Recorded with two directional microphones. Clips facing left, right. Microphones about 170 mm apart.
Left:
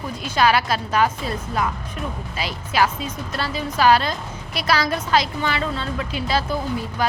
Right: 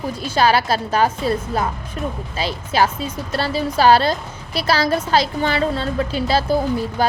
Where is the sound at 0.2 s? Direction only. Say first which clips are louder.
Right 2 dB; 30° right (ahead or behind).